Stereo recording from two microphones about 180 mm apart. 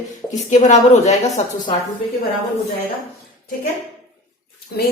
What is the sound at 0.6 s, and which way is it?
Speech, 40° left (ahead or behind).